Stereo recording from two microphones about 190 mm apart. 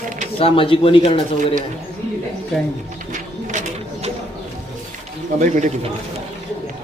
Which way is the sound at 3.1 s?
40° right (ahead or behind).